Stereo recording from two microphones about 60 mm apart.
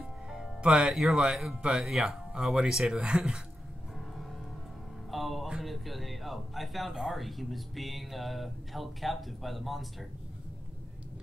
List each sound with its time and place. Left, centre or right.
0.6 s speech: centre
5.1 s a sound: centre
5.6 s speech: centre